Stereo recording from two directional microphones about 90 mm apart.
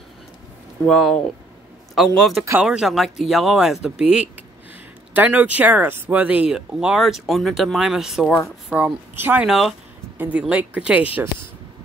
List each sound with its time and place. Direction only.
0.8 s speech: 5° left (ahead or behind)
8.6 s a woman's voice: 15° right (ahead or behind)
9.4 s speech: centre (ahead or behind)
10.1 s speech: 20° right (ahead or behind)